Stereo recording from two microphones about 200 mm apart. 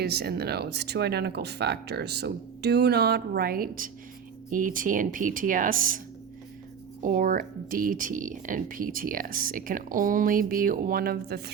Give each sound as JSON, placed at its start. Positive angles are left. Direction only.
{"t": 0.0, "sound": "speech", "side_deg": -55}
{"t": 7.0, "sound": "speech", "side_deg": -40}